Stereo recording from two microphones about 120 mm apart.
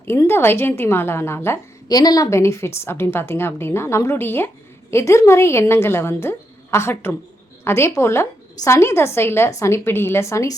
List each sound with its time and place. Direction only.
0.0 s a woman's voice: 20° left (ahead or behind)
1.9 s a woman's voice: 30° left (ahead or behind)